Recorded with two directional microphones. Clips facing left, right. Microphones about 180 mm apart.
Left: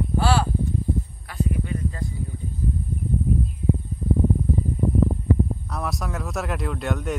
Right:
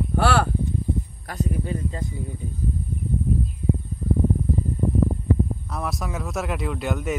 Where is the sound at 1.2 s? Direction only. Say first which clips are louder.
Even; 40° right (ahead or behind).